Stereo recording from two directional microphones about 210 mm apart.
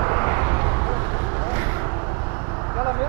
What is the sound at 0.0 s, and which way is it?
Vehicle, 20° right (ahead or behind).